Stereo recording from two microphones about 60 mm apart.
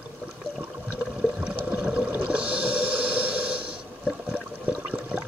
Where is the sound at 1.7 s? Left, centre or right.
Centre.